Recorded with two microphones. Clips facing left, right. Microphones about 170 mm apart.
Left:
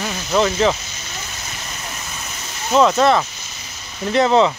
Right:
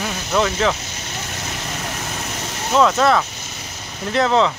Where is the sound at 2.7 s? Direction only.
Centre (ahead or behind).